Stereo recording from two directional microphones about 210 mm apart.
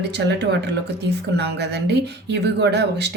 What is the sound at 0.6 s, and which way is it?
Speech, 55° right (ahead or behind).